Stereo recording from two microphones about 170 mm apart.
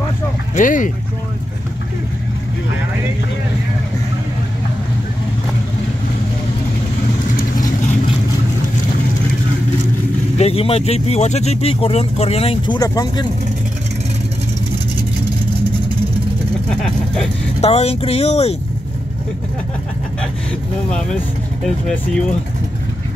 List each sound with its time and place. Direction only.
0.6 s speech: 50° left (ahead or behind)
10.3 s speech: 35° left (ahead or behind)
16.8 s speech: 5° left (ahead or behind)
17.6 s speech: 35° left (ahead or behind)